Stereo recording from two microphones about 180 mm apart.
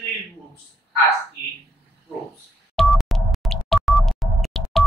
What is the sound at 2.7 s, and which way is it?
Music, centre (ahead or behind).